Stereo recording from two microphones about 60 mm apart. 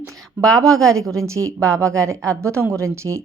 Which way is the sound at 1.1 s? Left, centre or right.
Right.